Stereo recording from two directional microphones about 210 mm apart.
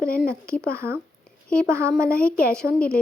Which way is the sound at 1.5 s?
5° left (ahead or behind).